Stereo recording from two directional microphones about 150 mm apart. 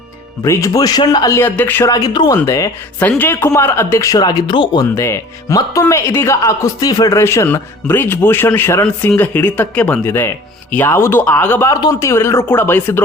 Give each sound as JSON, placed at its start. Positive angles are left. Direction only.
{"t": 0.4, "sound": "speech", "side_deg": 20}
{"t": 3.0, "sound": "speech", "side_deg": 10}
{"t": 4.9, "sound": "speech", "side_deg": 20}